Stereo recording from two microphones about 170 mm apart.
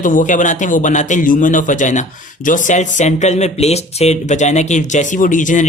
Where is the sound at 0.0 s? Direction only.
50° left (ahead or behind).